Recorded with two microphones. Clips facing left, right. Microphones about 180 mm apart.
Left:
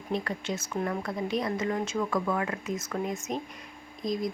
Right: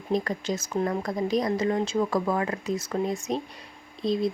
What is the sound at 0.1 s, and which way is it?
A woman's voice, 40° right (ahead or behind).